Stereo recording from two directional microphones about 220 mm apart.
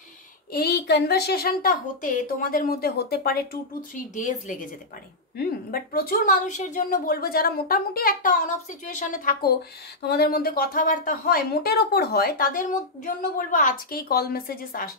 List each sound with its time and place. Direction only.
0.5 s speech: 45° left (ahead or behind)
3.9 s speech: 35° left (ahead or behind)